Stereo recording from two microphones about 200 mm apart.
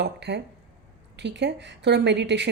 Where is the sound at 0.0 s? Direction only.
60° right (ahead or behind).